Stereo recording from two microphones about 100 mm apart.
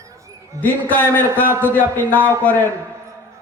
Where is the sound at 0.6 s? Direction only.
20° left (ahead or behind).